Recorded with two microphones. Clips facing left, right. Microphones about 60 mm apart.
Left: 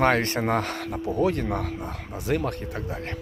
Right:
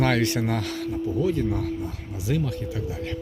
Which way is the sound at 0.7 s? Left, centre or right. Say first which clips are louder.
Even; left.